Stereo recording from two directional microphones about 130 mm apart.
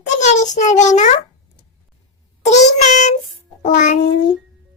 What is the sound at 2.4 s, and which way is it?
A child's voice, 65° left (ahead or behind).